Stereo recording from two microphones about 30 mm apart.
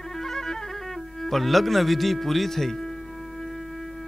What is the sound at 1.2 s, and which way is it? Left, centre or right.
A man's voice, centre.